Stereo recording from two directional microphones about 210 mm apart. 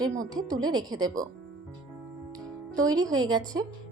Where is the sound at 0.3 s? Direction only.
15° right (ahead or behind).